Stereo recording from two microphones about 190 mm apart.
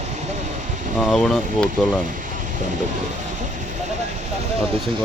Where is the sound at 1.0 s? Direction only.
Centre (ahead or behind).